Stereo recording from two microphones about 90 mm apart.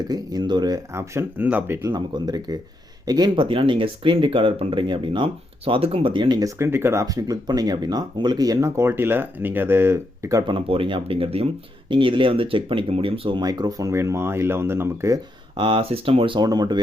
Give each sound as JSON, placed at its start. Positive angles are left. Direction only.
{"t": 0.0, "sound": "speech", "side_deg": -50}
{"t": 0.9, "sound": "speech", "side_deg": -30}
{"t": 1.8, "sound": "speech", "side_deg": -50}
{"t": 6.6, "sound": "speech", "side_deg": -25}
{"t": 10.4, "sound": "speech", "side_deg": -80}
{"t": 11.9, "sound": "speech", "side_deg": -70}
{"t": 13.4, "sound": "speech", "side_deg": -45}
{"t": 15.5, "sound": "speech", "side_deg": -70}
{"t": 16.4, "sound": "speech", "side_deg": -50}